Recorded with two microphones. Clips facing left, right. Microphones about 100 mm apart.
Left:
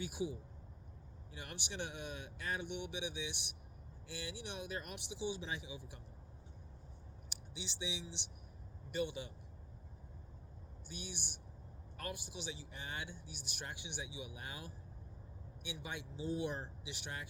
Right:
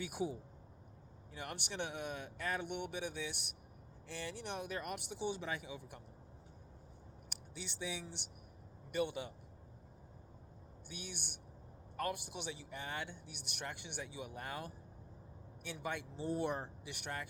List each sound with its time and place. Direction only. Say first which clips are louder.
0.0 s speech: right 1 dB; 55° right (ahead or behind)
1.4 s speech: right 3 dB; 55° right (ahead or behind)
7.3 s speech: even; 55° right (ahead or behind)
10.9 s speech: even; 55° right (ahead or behind)